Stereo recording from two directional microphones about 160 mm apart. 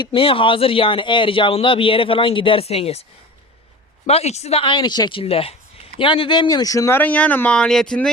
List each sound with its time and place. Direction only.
0.0 s speech: 35° left (ahead or behind)
4.0 s speech: 40° left (ahead or behind); by 8.1 s 5° left (ahead or behind)